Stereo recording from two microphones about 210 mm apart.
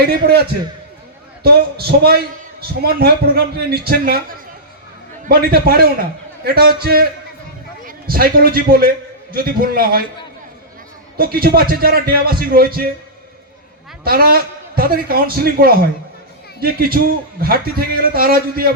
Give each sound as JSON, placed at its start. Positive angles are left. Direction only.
{"t": 0.0, "sound": "a man's voice", "side_deg": -50}
{"t": 1.5, "sound": "a man's voice", "side_deg": -50}
{"t": 11.2, "sound": "a man's voice", "side_deg": -45}
{"t": 14.0, "sound": "a man's voice", "side_deg": -45}